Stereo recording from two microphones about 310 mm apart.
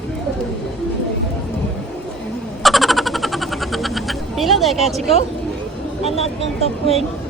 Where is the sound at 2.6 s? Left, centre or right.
Centre.